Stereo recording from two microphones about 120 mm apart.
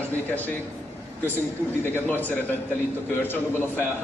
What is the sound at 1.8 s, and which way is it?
A man's voice, 15° left (ahead or behind).